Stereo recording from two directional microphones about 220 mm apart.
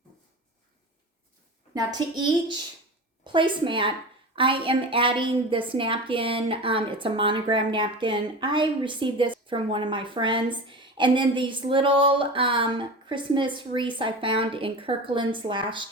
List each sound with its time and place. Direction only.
1.7 s a woman's voice: 20° right (ahead or behind)